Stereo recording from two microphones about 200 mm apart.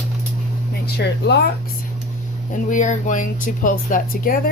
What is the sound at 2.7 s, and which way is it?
Speech, 40° left (ahead or behind).